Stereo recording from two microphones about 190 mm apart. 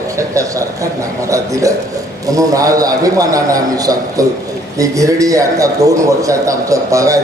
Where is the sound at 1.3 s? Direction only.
15° right (ahead or behind).